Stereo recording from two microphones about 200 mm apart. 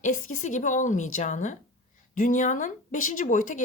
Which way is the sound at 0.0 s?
40° left (ahead or behind).